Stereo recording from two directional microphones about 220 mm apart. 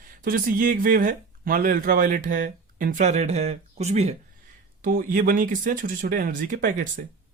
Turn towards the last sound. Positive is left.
turn(degrees=-40)  # may be behind; listen again after turning